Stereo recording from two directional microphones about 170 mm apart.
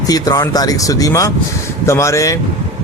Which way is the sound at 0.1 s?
20° left (ahead or behind).